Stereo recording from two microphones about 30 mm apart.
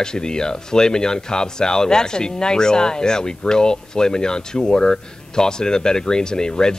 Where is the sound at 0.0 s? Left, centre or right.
Left.